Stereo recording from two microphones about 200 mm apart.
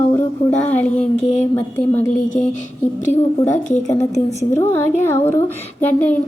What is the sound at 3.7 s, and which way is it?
Speech, 35° left (ahead or behind).